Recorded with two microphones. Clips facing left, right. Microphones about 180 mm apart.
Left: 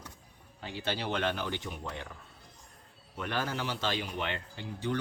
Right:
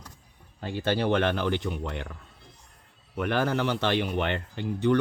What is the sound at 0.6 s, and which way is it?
Speech, 50° right (ahead or behind).